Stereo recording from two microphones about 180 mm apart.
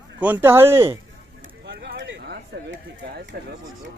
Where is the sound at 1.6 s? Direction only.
65° right (ahead or behind); by 3.3 s 80° right.